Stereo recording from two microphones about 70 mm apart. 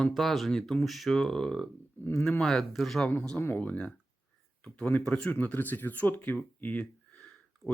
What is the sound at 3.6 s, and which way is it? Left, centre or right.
Speech, left.